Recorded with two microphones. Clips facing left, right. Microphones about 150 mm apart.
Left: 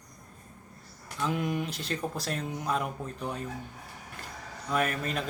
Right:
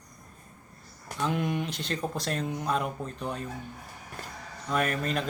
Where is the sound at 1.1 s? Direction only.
Centre (ahead or behind).